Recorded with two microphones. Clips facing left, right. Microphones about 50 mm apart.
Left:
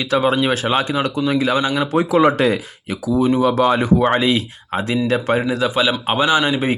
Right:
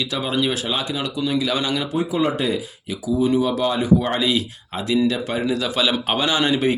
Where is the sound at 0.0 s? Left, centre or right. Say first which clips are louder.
Left 6 dB; left.